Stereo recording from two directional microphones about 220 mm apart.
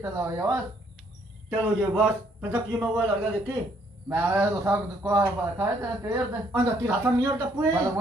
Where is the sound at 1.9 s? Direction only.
10° right (ahead or behind).